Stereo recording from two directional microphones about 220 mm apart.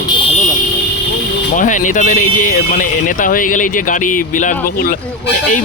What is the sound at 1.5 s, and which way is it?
Speech, 35° left (ahead or behind).